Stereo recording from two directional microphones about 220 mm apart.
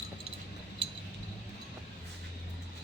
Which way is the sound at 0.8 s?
25° right (ahead or behind).